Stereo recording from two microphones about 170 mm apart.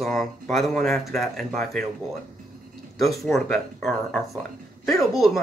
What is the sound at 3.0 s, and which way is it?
Speech, centre (ahead or behind).